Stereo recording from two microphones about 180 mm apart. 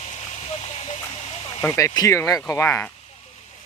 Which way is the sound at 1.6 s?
15° left (ahead or behind).